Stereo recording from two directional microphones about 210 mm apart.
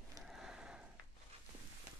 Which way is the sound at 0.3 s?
5° right (ahead or behind).